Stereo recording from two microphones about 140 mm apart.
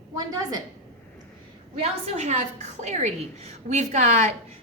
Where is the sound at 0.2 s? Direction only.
30° right (ahead or behind).